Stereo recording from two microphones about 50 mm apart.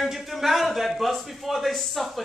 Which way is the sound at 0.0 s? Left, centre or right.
Centre.